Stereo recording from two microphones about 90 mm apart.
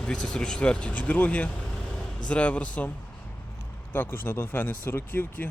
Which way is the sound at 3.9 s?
25° left (ahead or behind).